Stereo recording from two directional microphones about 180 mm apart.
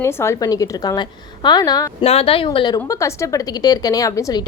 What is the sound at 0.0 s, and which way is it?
A woman's voice, 15° left (ahead or behind).